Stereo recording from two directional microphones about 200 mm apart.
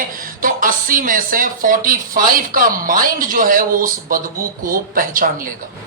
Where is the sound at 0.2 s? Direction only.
45° right (ahead or behind).